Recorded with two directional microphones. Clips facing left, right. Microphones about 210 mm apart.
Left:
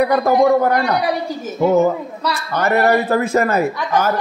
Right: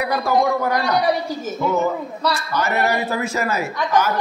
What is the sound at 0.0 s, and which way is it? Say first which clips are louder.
Speech: left 5 dB; 55° left (ahead or behind).